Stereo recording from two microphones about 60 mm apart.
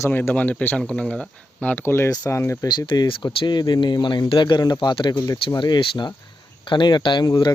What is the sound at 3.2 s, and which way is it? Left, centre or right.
Speech, left.